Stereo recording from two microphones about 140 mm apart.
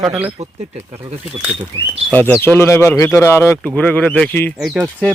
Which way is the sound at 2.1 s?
15° left (ahead or behind).